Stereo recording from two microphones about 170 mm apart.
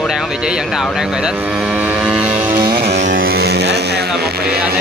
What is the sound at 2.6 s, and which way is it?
Music, 70° right (ahead or behind).